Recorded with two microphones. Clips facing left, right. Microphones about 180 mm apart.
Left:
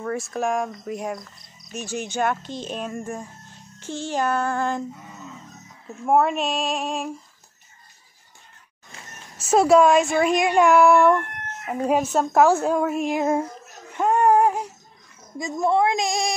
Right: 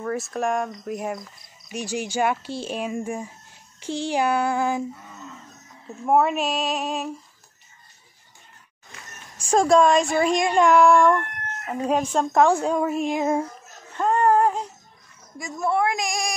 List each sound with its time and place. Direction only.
0.0 s a woman's voice: centre (ahead or behind)
5.9 s a woman's voice: centre (ahead or behind)
9.4 s a woman's voice: 5° left (ahead or behind)
13.9 s a sound: 10° left (ahead or behind)
15.3 s a woman's voice: 20° left (ahead or behind)